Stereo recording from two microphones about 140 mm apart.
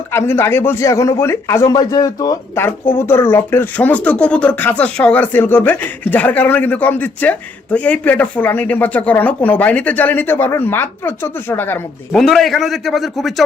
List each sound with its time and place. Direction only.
0.1 s a man's voice: 15° left (ahead or behind)
2.6 s speech: 15° left (ahead or behind)
12.1 s a man's voice: centre (ahead or behind)